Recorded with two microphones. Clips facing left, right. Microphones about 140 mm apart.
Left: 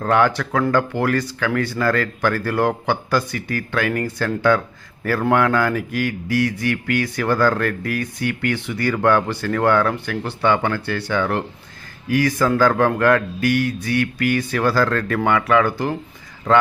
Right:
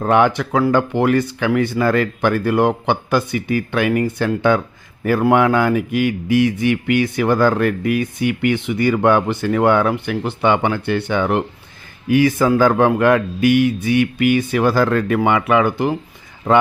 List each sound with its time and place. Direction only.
0.0 s a man's voice: 20° right (ahead or behind)